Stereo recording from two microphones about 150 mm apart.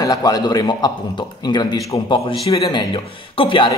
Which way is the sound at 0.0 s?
25° left (ahead or behind).